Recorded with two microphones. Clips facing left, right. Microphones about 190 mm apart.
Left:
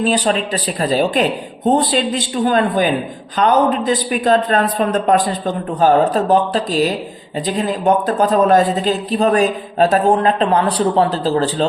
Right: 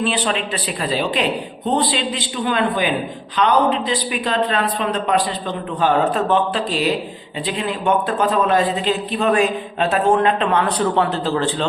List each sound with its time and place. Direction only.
0.0 s a man's voice: 40° left (ahead or behind)